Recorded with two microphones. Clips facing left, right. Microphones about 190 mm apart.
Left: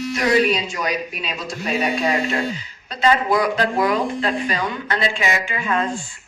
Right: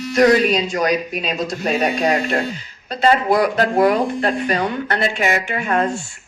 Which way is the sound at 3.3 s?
55° right (ahead or behind).